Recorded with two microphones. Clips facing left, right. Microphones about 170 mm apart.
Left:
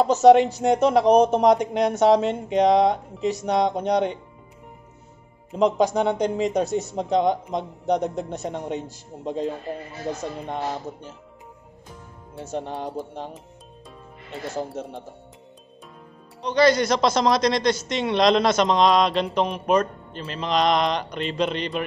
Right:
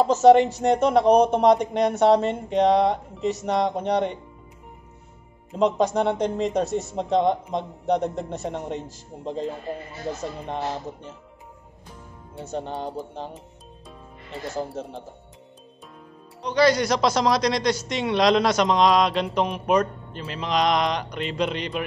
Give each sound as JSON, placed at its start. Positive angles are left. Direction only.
{"t": 0.0, "sound": "speech", "side_deg": 0}
{"t": 5.6, "sound": "speech", "side_deg": 0}
{"t": 12.5, "sound": "speech", "side_deg": 0}
{"t": 14.8, "sound": "speech", "side_deg": 0}
{"t": 16.4, "sound": "a man's voice", "side_deg": -10}